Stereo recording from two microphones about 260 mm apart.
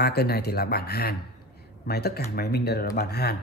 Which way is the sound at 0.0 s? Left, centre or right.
Left.